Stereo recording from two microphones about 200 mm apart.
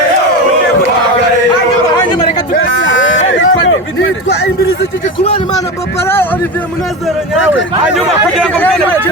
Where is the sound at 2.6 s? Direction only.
70° left (ahead or behind).